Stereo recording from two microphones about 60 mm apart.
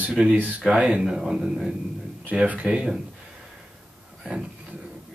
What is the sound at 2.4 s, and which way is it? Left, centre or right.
Speech, right.